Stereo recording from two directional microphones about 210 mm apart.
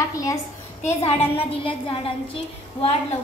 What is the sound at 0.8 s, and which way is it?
A woman's voice, 30° left (ahead or behind).